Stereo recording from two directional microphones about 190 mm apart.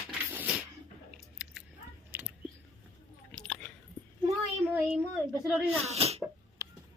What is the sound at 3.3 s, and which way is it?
Chewing, 5° left (ahead or behind).